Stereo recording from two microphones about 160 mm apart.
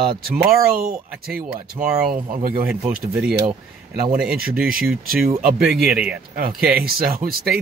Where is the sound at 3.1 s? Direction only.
5° right (ahead or behind).